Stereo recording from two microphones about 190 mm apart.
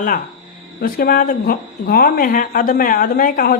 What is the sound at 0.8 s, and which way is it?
Speech, 50° left (ahead or behind).